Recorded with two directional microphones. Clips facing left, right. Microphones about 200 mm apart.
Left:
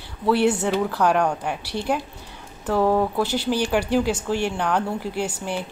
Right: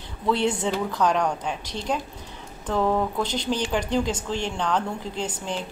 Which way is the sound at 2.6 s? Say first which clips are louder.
Left 3 dB; 10° left (ahead or behind).